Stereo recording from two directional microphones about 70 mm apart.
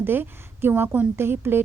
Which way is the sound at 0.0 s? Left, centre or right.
Right.